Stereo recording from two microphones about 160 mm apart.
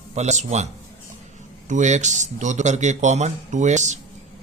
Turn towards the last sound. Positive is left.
turn(degrees=-50)  # may be behind; listen again after turning